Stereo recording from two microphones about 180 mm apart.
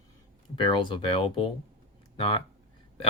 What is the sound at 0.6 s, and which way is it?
Speech, 25° left (ahead or behind).